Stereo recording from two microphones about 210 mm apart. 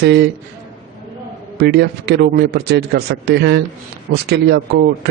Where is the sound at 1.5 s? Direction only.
50° right (ahead or behind).